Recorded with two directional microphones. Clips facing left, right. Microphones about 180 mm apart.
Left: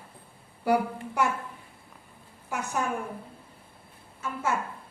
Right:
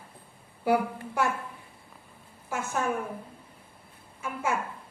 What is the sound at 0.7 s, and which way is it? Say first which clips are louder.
Speech: even; centre (ahead or behind).